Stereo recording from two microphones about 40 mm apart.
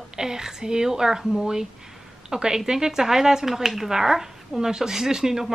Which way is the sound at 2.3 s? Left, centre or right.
Centre.